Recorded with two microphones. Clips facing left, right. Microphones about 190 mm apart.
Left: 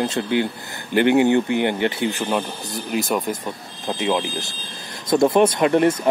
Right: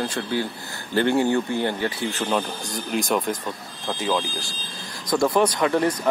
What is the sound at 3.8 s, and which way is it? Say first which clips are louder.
Speech: left 3 dB; 20° left (ahead or behind).